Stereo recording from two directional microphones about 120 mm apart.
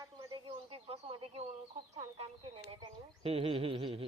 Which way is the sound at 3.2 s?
50° right (ahead or behind).